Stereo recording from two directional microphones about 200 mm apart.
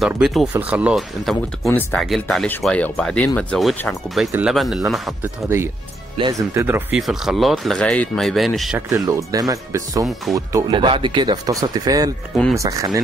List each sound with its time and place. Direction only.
0.0 s speech: centre (ahead or behind)
6.5 s speech: 10° right (ahead or behind)
8.8 s speech: 15° right (ahead or behind)